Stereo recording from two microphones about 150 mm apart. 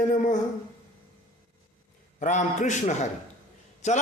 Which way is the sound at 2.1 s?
55° left (ahead or behind).